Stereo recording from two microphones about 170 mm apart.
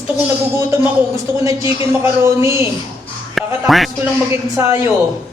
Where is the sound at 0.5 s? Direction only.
15° right (ahead or behind).